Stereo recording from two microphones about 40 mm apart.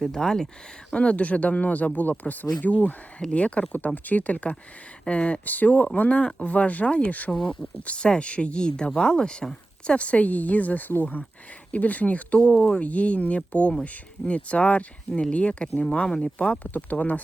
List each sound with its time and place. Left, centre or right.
0.0 s speech: centre
0.9 s speech: left
3.3 s speech: left
5.5 s speech: left
6.1 s speech: left
16.7 s speech: left